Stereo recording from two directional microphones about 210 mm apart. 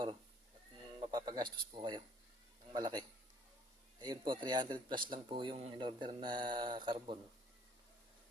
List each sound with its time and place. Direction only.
1.0 s speech: 20° right (ahead or behind)
4.0 s speech: 20° right (ahead or behind)